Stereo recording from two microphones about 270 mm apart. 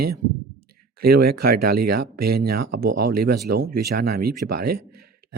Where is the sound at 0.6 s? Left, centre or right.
Right.